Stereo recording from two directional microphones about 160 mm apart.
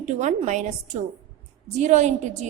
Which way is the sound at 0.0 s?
45° right (ahead or behind).